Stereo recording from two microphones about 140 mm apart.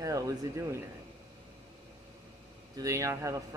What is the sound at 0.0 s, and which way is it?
Speech, 25° right (ahead or behind).